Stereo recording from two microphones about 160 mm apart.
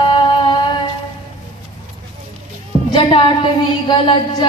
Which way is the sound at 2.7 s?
30° left (ahead or behind).